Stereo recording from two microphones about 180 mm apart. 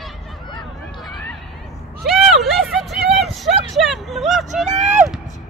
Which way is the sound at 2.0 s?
Centre (ahead or behind).